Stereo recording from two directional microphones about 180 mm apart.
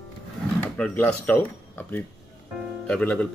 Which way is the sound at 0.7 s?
5° left (ahead or behind).